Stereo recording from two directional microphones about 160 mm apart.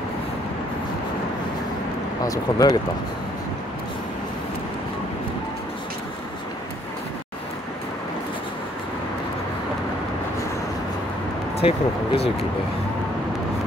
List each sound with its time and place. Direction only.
2.2 s speech: 25° left (ahead or behind)
11.6 s speech: 35° left (ahead or behind)